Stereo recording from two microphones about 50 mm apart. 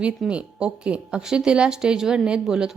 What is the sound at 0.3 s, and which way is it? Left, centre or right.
A woman's voice, right.